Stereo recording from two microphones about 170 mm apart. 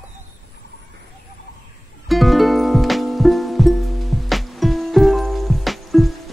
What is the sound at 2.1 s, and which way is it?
Music, centre (ahead or behind).